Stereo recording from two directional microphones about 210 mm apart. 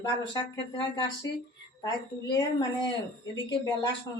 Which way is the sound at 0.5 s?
20° left (ahead or behind).